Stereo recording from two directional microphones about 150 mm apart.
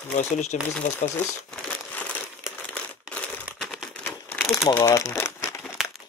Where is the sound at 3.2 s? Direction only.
Centre (ahead or behind).